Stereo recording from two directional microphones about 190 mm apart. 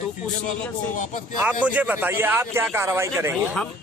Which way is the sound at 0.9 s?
40° left (ahead or behind).